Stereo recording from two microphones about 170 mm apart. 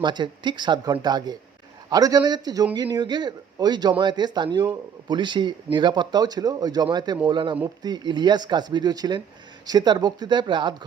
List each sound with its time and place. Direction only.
0.0 s a man's voice: 25° right (ahead or behind)